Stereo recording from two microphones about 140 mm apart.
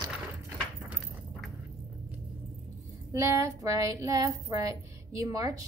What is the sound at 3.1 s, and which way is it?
A woman's voice, 20° right (ahead or behind).